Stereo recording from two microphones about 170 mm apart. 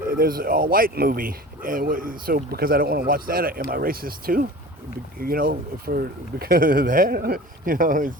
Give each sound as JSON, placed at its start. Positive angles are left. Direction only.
{"t": 0.1, "sound": "speech", "side_deg": -55}